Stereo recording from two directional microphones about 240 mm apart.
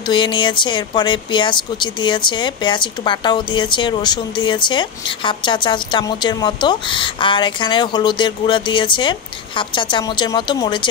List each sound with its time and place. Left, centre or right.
0.1 s speech: centre